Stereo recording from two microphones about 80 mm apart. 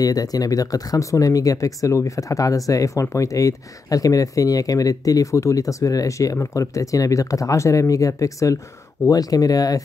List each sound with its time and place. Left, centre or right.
0.0 s speech: left